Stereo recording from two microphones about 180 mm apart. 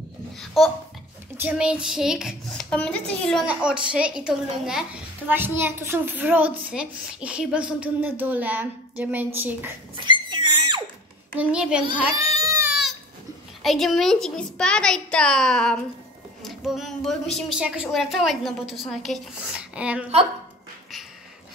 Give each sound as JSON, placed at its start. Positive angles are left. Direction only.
{"t": 0.6, "sound": "a woman's voice", "side_deg": 0}
{"t": 9.9, "sound": "a sound", "side_deg": -25}
{"t": 11.3, "sound": "a woman's voice", "side_deg": -5}
{"t": 12.4, "sound": "goat", "side_deg": -20}
{"t": 13.6, "sound": "a woman's voice", "side_deg": 0}